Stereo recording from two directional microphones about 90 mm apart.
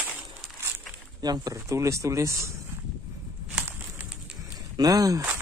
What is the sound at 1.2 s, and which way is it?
Speech, 45° right (ahead or behind).